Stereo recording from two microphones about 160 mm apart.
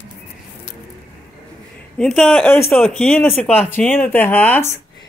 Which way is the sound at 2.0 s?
5° left (ahead or behind).